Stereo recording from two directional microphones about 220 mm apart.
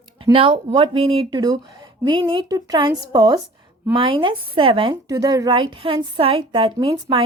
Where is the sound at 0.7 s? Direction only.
25° right (ahead or behind).